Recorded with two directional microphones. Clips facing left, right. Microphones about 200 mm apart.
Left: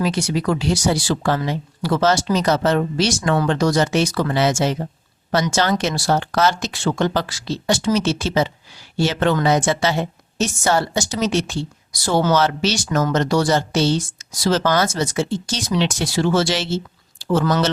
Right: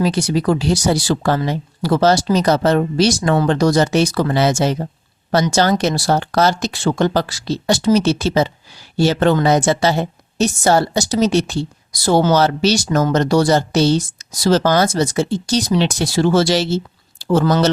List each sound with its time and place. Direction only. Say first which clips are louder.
0.0 s a woman's voice: right 4 dB; 35° right (ahead or behind)